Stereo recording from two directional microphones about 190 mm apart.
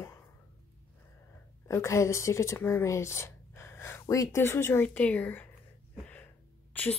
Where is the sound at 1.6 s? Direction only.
15° left (ahead or behind).